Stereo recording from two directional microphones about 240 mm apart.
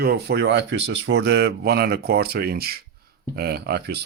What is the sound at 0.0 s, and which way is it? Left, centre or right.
Speech, right.